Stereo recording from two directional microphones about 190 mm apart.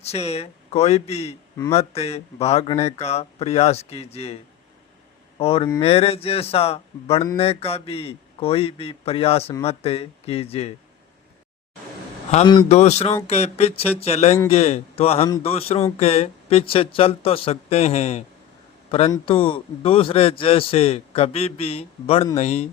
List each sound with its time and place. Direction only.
0.0 s speech: 35° left (ahead or behind)
5.4 s speech: 30° left (ahead or behind)
12.5 s a man's voice: 30° left (ahead or behind)